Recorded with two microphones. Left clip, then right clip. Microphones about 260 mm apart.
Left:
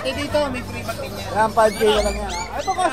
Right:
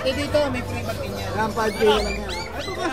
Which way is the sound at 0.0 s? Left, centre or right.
Centre.